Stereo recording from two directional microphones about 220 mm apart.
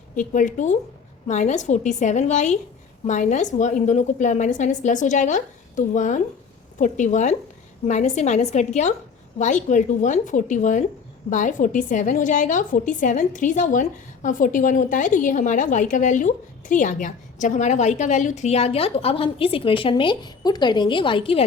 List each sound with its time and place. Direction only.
0.2 s a woman's voice: 35° left (ahead or behind)